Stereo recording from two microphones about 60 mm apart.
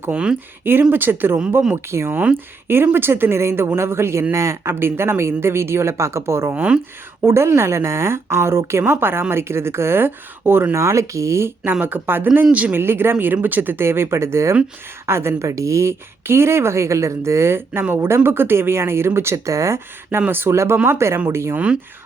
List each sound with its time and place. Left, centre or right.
0.6 s speech: right
1.7 s speech: right
4.7 s speech: right
6.6 s speech: centre
7.3 s speech: right
10.7 s speech: right
11.6 s speech: right
12.5 s speech: right
12.7 s speech: right
20.1 s speech: right
20.5 s speech: right
21.5 s speech: centre